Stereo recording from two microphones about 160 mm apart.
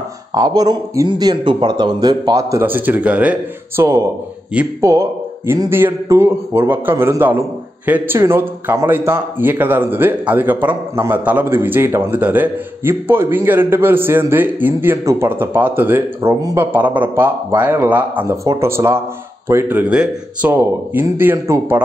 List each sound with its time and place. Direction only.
0.3 s a man's voice: 25° right (ahead or behind)